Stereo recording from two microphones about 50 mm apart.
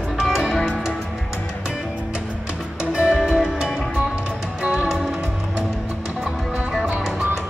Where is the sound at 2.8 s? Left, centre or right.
Right.